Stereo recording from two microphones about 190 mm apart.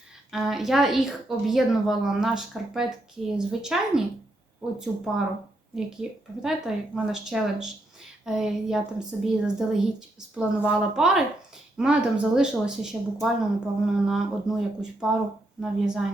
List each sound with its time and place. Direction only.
0.3 s a woman's voice: centre (ahead or behind)